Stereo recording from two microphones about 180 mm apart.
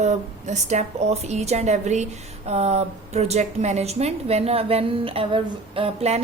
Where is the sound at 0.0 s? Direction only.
40° right (ahead or behind).